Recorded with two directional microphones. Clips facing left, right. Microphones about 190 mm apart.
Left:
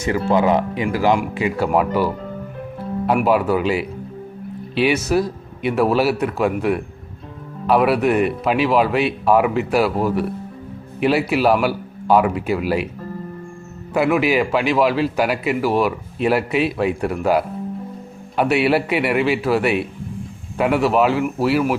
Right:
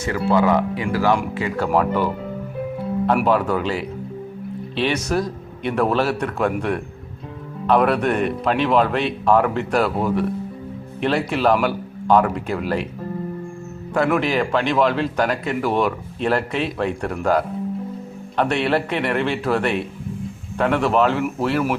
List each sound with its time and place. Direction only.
0.0 s a man's voice: 20° left (ahead or behind)
3.2 s a man's voice: 10° left (ahead or behind)
13.9 s a man's voice: 5° left (ahead or behind)